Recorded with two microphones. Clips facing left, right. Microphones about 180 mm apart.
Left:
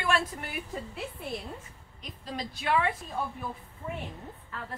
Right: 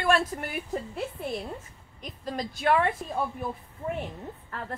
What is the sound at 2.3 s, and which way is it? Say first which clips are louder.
Speech: right 4 dB; 50° right (ahead or behind).